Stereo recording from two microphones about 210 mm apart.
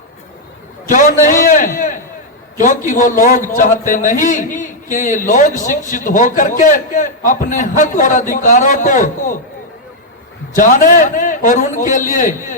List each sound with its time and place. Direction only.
0.9 s a man's voice: 35° left (ahead or behind)
10.5 s a man's voice: 40° left (ahead or behind)